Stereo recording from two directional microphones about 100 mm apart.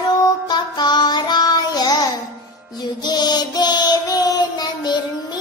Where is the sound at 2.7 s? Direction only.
45° left (ahead or behind).